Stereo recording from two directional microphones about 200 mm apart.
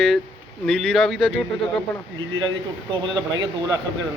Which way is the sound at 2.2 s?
80° right.